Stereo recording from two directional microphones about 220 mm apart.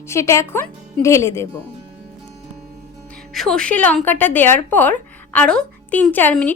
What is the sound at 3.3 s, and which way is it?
A woman's voice, centre (ahead or behind).